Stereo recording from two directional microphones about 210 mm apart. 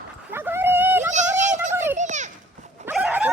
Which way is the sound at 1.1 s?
35° right (ahead or behind).